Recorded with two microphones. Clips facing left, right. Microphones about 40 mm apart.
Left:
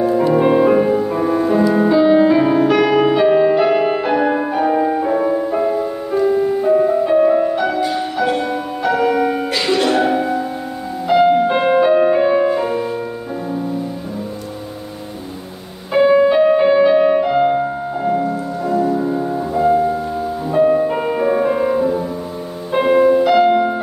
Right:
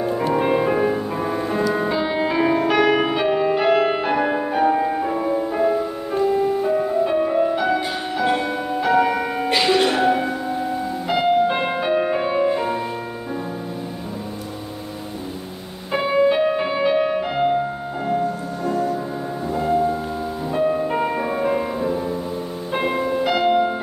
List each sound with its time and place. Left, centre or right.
0.3 s music: centre
15.9 s music: centre
18.2 s music: left
18.9 s music: centre